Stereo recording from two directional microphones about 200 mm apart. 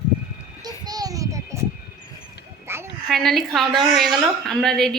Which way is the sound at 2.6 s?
10° right (ahead or behind).